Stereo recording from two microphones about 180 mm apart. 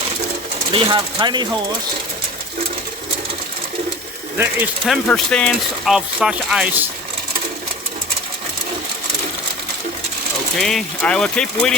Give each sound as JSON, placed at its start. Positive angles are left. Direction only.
{"t": 0.7, "sound": "speech", "side_deg": -25}
{"t": 4.4, "sound": "speech", "side_deg": -10}
{"t": 5.0, "sound": "speech", "side_deg": 5}
{"t": 10.6, "sound": "speech", "side_deg": 0}